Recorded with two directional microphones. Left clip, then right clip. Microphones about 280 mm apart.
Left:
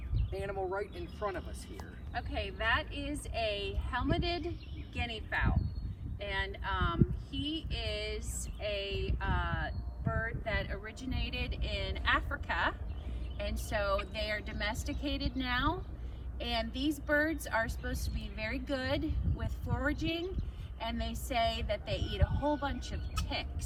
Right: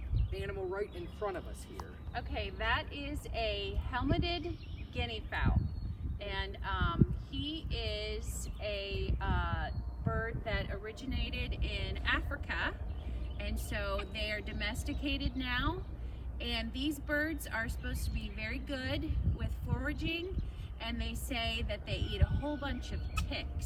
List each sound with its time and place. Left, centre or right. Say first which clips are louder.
0.3 s speech: left 3 dB; centre; by 5.5 s left
6.1 s a sound: left 3 dB; left
10.7 s speech: even; centre